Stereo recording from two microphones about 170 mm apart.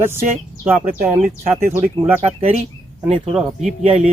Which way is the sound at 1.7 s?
15° right (ahead or behind).